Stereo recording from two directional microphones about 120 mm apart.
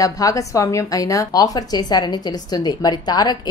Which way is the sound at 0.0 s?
30° left (ahead or behind).